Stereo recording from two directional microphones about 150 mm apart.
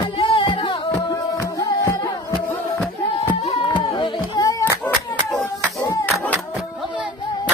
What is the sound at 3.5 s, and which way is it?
Music, 30° left (ahead or behind).